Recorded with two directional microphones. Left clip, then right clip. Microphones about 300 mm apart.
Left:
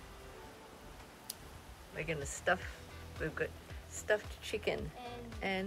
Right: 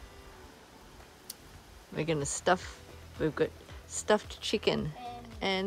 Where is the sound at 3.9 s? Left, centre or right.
Right.